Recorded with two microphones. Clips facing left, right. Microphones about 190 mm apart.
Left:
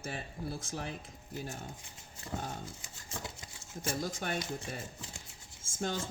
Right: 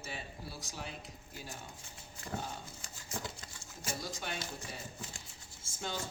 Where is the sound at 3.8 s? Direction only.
50° left (ahead or behind).